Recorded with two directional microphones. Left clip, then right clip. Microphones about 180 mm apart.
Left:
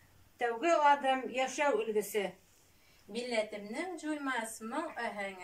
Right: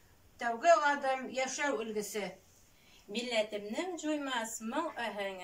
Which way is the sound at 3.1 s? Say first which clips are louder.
Right 1 dB; centre (ahead or behind).